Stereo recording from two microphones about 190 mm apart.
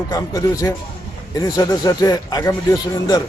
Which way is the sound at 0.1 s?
15° left (ahead or behind).